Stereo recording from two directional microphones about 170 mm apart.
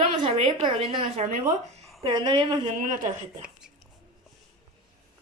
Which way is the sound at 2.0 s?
25° right (ahead or behind).